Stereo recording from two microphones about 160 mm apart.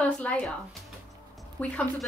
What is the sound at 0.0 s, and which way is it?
Speech, 10° left (ahead or behind).